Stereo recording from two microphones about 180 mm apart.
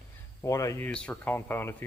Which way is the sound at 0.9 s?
5° left (ahead or behind).